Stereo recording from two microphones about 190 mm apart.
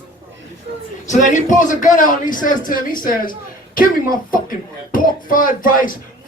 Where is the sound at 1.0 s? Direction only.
40° left (ahead or behind).